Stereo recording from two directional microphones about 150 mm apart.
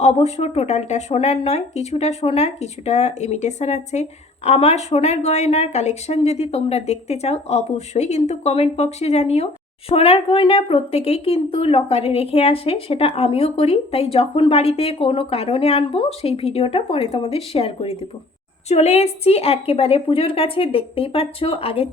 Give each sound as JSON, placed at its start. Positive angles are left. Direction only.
{"t": 0.0, "sound": "a woman's voice", "side_deg": 45}